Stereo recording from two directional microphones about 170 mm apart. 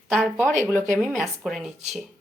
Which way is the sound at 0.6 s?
15° right (ahead or behind).